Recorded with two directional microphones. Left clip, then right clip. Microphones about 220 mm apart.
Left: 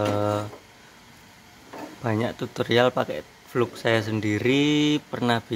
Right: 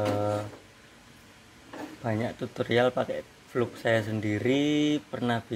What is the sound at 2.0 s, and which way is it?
Speech, 25° left (ahead or behind).